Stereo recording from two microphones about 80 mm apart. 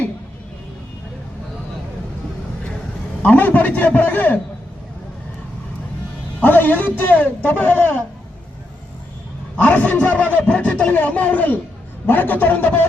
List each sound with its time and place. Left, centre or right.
3.2 s a man's voice: left
6.4 s a man's voice: left
9.6 s a man's voice: left